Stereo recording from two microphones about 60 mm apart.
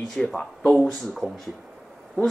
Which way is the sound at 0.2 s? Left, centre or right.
Centre.